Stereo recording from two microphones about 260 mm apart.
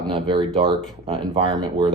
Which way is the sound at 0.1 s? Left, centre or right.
Centre.